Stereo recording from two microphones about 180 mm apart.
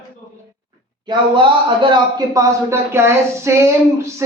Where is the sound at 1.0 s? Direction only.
30° right (ahead or behind).